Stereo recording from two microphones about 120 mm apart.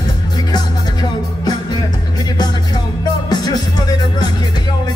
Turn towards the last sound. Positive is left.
turn(degrees=35)  # may be behind; listen again after turning